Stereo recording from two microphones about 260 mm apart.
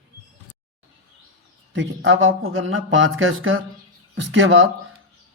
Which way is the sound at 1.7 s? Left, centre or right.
Right.